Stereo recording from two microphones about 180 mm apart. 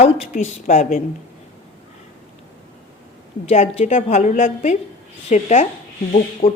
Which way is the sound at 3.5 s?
40° left (ahead or behind).